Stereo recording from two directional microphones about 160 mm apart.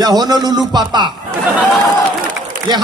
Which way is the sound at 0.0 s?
25° right (ahead or behind).